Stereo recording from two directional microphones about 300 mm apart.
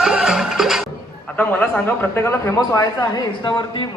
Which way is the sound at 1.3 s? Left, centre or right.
Centre.